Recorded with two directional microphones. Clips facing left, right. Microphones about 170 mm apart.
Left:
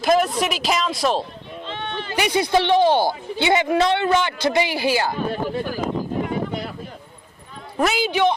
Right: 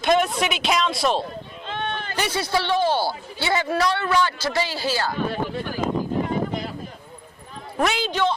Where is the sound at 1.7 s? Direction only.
50° right (ahead or behind).